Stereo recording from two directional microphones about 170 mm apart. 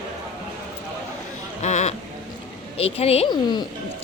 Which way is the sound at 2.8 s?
35° left (ahead or behind).